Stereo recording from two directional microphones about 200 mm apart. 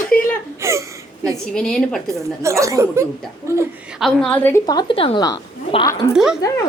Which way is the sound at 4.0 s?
Centre (ahead or behind).